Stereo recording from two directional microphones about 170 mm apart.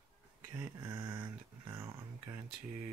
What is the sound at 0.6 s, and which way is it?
Speech, 15° right (ahead or behind).